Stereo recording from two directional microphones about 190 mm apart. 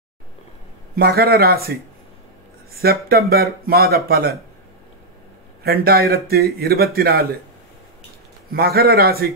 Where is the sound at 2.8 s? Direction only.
55° right (ahead or behind).